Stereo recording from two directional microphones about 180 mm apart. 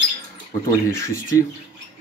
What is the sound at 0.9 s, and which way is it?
Speech, 15° left (ahead or behind).